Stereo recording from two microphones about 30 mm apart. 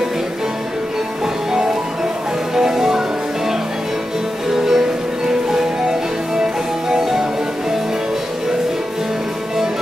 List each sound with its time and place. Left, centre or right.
2.5 s music: centre
4.5 s music: centre